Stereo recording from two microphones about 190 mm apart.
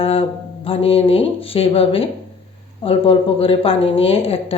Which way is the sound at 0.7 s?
30° left (ahead or behind).